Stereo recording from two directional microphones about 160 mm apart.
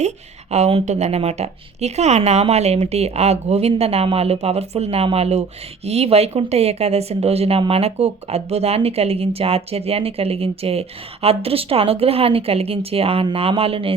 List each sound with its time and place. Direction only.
0.5 s speech: 45° right (ahead or behind)